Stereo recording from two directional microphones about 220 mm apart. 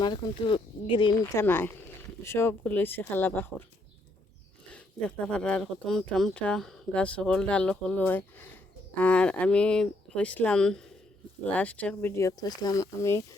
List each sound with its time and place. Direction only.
0.0 s speech: 20° left (ahead or behind)
1.2 s speech: 10° left (ahead or behind)
4.7 s speech: 5° left (ahead or behind)